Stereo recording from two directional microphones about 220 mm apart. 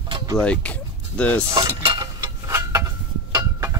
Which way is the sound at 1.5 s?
20° right (ahead or behind).